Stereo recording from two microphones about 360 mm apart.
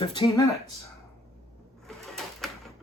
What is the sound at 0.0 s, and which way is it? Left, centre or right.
Speech, centre.